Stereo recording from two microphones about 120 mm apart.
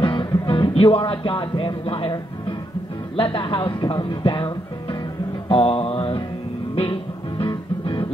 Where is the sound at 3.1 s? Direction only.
45° left (ahead or behind).